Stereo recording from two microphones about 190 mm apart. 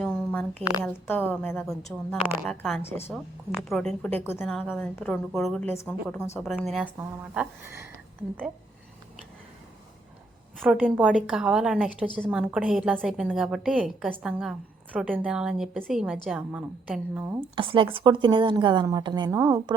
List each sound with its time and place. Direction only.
0.0 s a sound: 5° left (ahead or behind)
0.6 s a woman's voice: 15° left (ahead or behind)
7.3 s a woman's voice: 15° right (ahead or behind)
10.6 s a woman's voice: 5° right (ahead or behind)
17.5 s a woman's voice: 25° right (ahead or behind)